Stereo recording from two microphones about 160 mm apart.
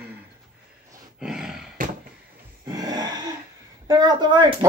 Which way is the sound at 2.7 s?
25° right (ahead or behind).